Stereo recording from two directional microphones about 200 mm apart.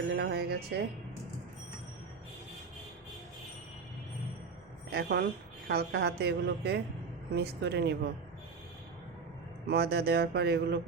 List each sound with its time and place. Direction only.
0.1 s music: 55° right (ahead or behind)
4.9 s a woman's voice: 55° right (ahead or behind)
9.6 s a woman's voice: 55° right (ahead or behind)